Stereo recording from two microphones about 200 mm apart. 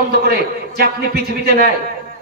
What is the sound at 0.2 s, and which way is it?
A man's voice, 50° right (ahead or behind).